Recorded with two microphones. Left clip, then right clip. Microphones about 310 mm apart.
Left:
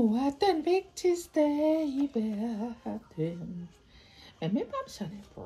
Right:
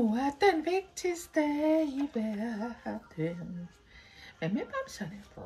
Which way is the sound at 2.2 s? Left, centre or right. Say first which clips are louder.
Left 1 dB; right.